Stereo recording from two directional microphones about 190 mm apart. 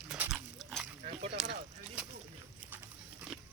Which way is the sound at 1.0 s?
35° right (ahead or behind).